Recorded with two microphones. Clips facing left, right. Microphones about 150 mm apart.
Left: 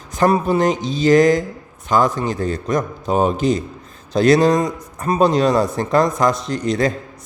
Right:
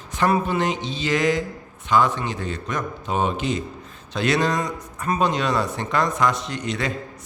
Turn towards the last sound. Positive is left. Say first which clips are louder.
# left 8 dB
turn(degrees=35)  # may be behind; listen again after turning